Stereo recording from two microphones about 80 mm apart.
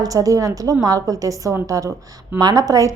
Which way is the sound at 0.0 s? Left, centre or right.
Right.